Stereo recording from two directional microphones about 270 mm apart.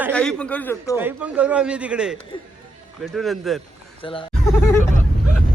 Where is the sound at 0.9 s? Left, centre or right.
Centre.